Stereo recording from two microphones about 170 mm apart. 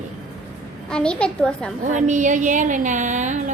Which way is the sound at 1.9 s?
45° right (ahead or behind).